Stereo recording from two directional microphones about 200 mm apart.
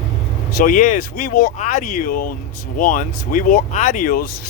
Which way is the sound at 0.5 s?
45° left (ahead or behind).